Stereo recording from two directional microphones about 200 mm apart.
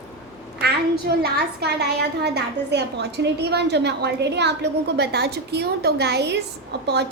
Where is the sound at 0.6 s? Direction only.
50° right (ahead or behind).